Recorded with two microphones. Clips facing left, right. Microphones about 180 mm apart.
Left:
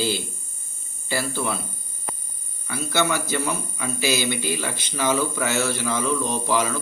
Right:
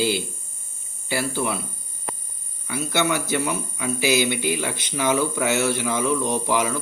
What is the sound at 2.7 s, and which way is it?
Speech, 15° right (ahead or behind).